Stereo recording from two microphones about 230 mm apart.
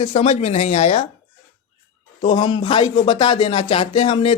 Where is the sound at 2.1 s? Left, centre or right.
Left.